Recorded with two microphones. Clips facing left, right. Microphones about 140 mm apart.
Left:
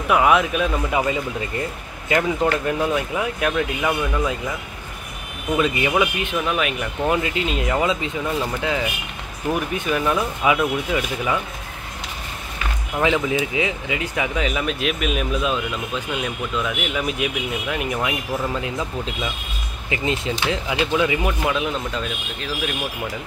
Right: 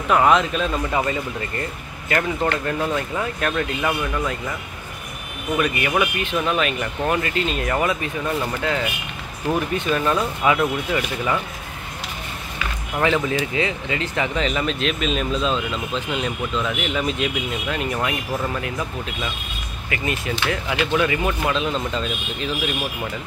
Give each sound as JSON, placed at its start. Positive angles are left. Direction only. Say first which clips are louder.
{"t": 0.1, "sound": "speech", "louder": "even", "side_deg": 10}
{"t": 5.6, "sound": "speech", "louder": "left 2 dB", "side_deg": 20}
{"t": 13.0, "sound": "speech", "louder": "even", "side_deg": 15}
{"t": 19.9, "sound": "speech", "louder": "left 2 dB", "side_deg": 20}